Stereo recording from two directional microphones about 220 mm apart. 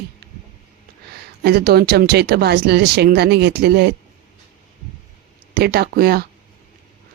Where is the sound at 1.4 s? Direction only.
45° right (ahead or behind).